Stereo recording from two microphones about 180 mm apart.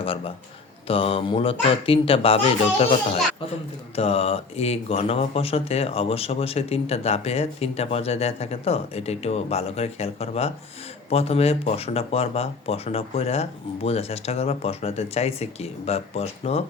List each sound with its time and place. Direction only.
0.9 s speech: 30° left (ahead or behind)
3.9 s speech: 35° left (ahead or behind)